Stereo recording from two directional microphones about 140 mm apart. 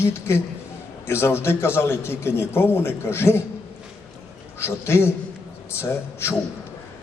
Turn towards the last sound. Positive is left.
turn(degrees=15)  # may be behind; listen again after turning